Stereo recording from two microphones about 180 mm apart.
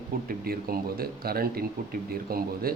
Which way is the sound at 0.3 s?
55° right (ahead or behind).